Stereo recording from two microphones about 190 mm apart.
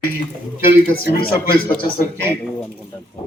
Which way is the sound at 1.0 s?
50° left (ahead or behind).